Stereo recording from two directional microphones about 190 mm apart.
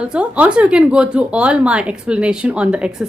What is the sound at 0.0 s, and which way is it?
A woman's voice, 5° right (ahead or behind).